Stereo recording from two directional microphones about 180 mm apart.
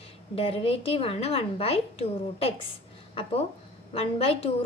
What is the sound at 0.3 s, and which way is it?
A woman's voice, 30° left (ahead or behind).